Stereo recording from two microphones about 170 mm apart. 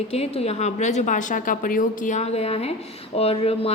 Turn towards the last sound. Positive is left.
turn(degrees=35)  # may be behind; listen again after turning